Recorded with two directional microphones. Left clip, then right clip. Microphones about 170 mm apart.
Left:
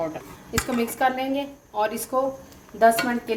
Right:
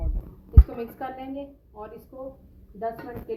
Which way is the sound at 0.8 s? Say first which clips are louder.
Left 11 dB; 90° left.